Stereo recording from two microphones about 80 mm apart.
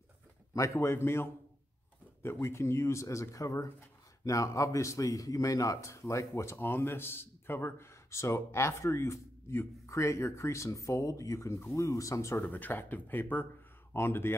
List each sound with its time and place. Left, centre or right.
0.6 s speech: left
2.4 s speech: left
12.4 s speech: left